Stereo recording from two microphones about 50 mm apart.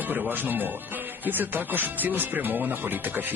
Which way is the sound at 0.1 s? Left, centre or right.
Right.